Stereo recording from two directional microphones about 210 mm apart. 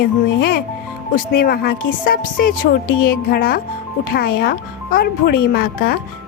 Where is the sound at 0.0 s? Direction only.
50° left (ahead or behind).